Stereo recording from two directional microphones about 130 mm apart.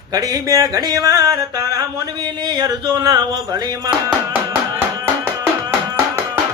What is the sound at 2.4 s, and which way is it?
Music, 35° right (ahead or behind).